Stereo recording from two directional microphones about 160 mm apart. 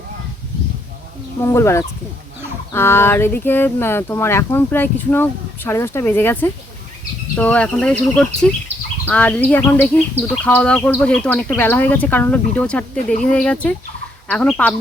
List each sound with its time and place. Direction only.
1.4 s speech: 15° left (ahead or behind)